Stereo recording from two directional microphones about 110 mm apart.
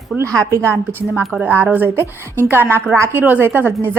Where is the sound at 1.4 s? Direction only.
15° right (ahead or behind).